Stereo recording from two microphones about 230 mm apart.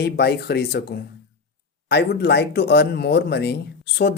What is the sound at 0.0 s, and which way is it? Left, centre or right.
Speech, left.